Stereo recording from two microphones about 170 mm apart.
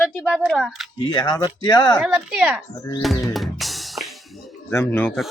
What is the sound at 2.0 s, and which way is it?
Speech, 5° right (ahead or behind).